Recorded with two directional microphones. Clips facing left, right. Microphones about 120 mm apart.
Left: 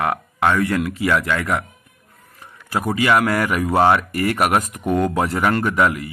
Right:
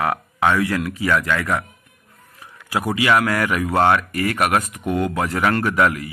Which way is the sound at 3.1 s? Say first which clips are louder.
Left 1 dB; 25° left (ahead or behind).